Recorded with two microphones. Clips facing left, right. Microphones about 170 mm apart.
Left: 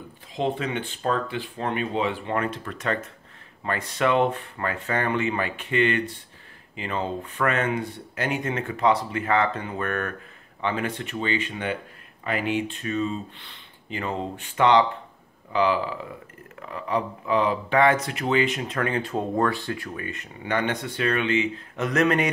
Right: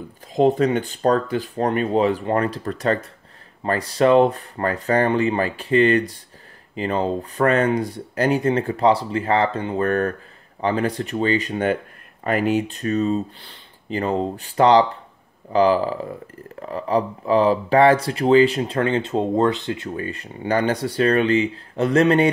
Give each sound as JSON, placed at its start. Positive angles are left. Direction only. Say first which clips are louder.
{"t": 0.3, "sound": "speech", "louder": "right 9 dB", "side_deg": -40}